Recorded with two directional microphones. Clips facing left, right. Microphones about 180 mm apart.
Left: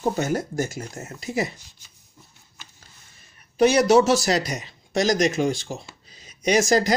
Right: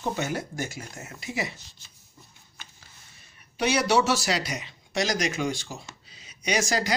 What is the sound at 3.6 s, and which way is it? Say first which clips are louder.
Speech: left 7 dB; 45° left (ahead or behind).